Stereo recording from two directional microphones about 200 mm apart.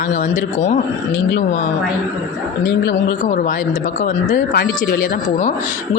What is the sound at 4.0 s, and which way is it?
Speech, 45° left (ahead or behind).